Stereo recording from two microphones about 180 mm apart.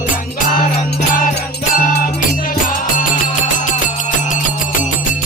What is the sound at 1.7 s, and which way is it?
Music, 50° left (ahead or behind).